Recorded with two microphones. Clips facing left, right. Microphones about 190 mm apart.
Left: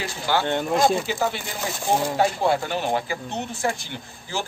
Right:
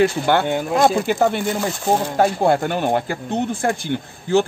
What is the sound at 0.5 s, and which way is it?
Speech, 5° right (ahead or behind).